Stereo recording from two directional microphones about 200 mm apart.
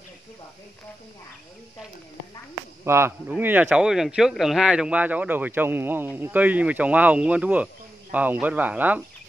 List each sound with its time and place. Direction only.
2.8 s speech: 10° right (ahead or behind)